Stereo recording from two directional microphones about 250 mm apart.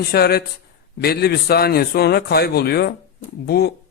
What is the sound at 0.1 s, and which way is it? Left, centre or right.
A man's voice, left.